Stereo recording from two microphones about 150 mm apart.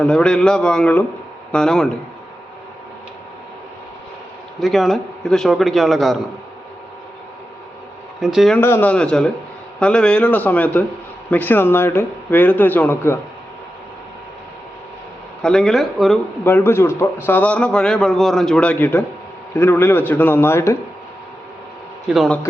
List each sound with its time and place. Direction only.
0.0 s a man's voice: 5° left (ahead or behind)
4.6 s a man's voice: centre (ahead or behind)
8.2 s a man's voice: centre (ahead or behind)
8.6 s speech: 15° left (ahead or behind)
15.4 s a man's voice: 5° left (ahead or behind)
16.4 s a man's voice: 15° left (ahead or behind)